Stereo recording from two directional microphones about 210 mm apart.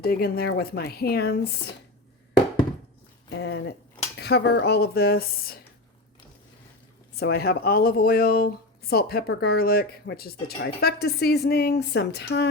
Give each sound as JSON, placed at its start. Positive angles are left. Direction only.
{"t": 0.0, "sound": "speech", "side_deg": 45}
{"t": 3.3, "sound": "speech", "side_deg": 55}
{"t": 7.2, "sound": "speech", "side_deg": 50}